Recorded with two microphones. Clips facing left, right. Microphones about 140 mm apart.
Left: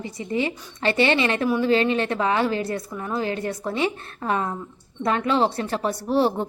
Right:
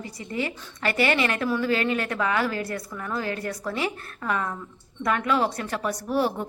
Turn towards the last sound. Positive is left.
turn(degrees=30)  # may be behind; listen again after turning